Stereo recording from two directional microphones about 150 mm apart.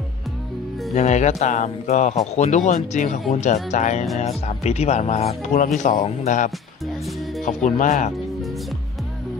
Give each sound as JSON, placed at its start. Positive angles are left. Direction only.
{"t": 0.9, "sound": "speech", "side_deg": 50}